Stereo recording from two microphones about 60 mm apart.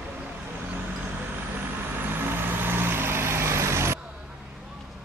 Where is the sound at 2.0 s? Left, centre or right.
Right.